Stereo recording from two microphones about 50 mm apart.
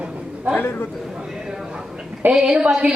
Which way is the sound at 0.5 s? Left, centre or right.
Left.